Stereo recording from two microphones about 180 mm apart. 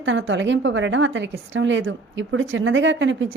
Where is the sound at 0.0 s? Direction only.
90° right.